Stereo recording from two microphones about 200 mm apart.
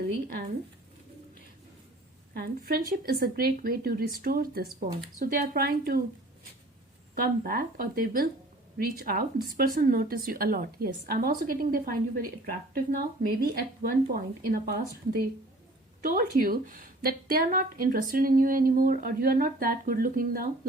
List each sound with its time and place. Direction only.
0.1 s speech: 50° right (ahead or behind)
2.3 s speech: 50° right (ahead or behind)
7.2 s speech: 45° right (ahead or behind)